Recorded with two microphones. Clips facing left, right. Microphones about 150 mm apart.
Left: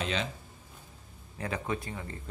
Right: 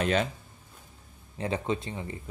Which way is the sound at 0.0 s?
50° right (ahead or behind).